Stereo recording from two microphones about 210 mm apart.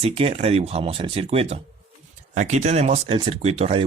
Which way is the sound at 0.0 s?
25° right (ahead or behind).